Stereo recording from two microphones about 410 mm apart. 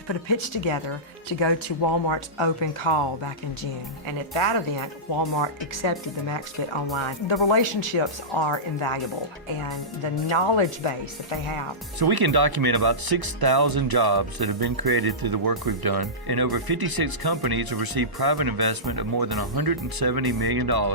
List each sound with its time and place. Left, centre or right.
0.1 s speech: left
4.8 s speech: left
10.3 s speech: left
11.9 s speech: right